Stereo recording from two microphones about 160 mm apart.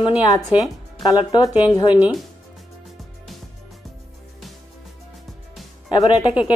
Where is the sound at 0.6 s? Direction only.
25° left (ahead or behind).